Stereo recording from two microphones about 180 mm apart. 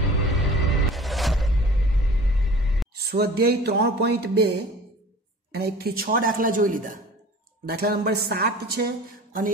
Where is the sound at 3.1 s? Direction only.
60° right (ahead or behind).